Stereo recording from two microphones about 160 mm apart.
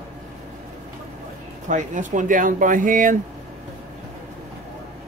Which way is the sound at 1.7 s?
50° right (ahead or behind).